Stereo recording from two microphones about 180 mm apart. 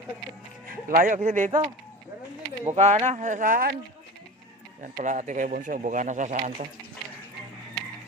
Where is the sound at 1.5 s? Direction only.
25° right (ahead or behind).